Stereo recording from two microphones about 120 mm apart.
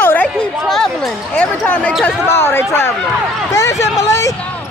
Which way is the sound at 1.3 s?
10° left (ahead or behind).